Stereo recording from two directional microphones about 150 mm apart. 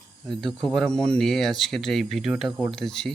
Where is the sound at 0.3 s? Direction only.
Centre (ahead or behind).